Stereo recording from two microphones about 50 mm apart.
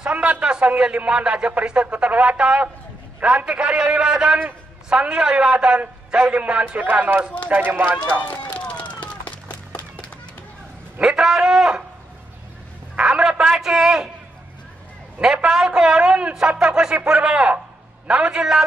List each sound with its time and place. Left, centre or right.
0.0 s a sound: right
0.4 s speech: right
8.2 s run: left
11.0 s a man's voice: centre
12.9 s a sound: right
15.1 s a man's voice: right